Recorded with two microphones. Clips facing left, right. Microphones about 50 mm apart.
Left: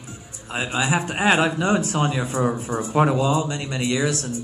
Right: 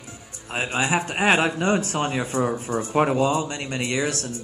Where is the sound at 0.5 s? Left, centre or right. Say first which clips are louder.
Even; right.